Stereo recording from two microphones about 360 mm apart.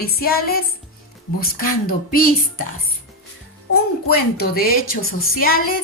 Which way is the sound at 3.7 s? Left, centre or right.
Left.